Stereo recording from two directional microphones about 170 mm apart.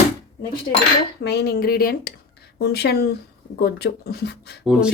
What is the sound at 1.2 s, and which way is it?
Speech, 75° left (ahead or behind).